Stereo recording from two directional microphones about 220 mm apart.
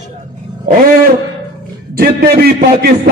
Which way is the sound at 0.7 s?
35° right (ahead or behind).